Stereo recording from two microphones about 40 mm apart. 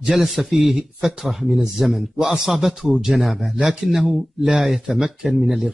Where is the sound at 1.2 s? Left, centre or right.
Centre.